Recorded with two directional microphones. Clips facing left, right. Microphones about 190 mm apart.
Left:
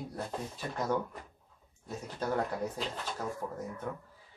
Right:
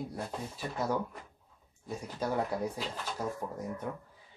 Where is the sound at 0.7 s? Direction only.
10° right (ahead or behind).